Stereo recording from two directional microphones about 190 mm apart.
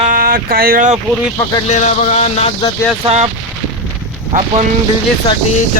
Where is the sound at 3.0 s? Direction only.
35° right (ahead or behind).